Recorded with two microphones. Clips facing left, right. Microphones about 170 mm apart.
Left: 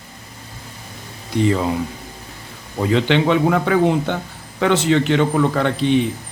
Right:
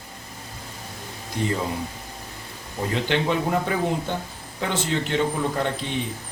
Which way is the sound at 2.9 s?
80° left.